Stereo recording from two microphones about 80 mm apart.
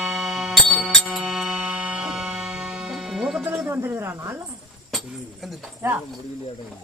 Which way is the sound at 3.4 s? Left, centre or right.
Right.